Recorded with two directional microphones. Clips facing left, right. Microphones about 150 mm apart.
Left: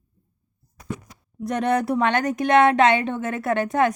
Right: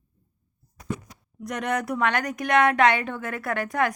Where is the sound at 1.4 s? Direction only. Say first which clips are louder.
Left 6 dB; 30° left (ahead or behind).